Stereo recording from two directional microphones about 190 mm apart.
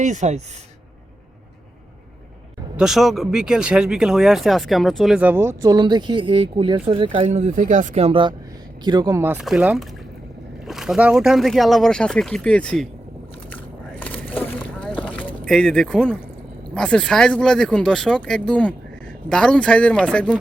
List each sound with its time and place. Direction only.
0.0 s speech: 40° right (ahead or behind)
2.7 s speech: centre (ahead or behind)
14.0 s a sound: 10° left (ahead or behind)
14.8 s vehicle: 5° left (ahead or behind)
15.4 s speech: centre (ahead or behind)